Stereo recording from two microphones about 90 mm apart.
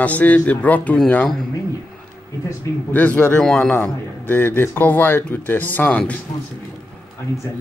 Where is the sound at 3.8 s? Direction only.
20° left (ahead or behind).